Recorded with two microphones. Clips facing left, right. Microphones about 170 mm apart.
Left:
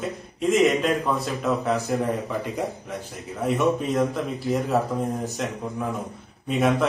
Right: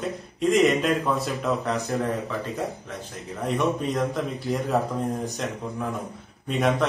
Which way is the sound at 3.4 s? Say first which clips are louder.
Left 2 dB; centre (ahead or behind).